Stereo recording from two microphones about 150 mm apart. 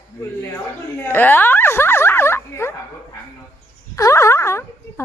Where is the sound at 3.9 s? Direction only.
20° left (ahead or behind).